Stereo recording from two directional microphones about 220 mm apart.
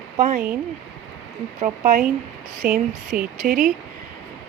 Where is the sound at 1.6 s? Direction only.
35° right (ahead or behind).